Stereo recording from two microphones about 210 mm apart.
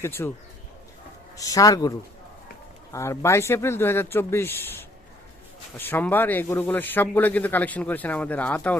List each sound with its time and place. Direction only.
0.0 s speech: 10° left (ahead or behind)
1.4 s speech: 15° left (ahead or behind)